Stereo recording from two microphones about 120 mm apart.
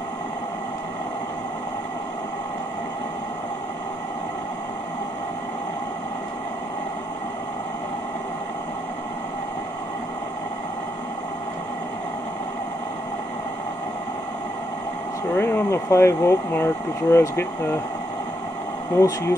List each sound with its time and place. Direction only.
15.3 s speech: 20° left (ahead or behind)
18.9 s speech: 25° left (ahead or behind)